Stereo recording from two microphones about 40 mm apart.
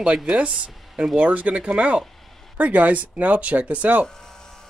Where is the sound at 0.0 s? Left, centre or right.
Right.